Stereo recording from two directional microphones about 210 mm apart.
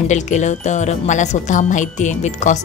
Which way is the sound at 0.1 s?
35° left (ahead or behind).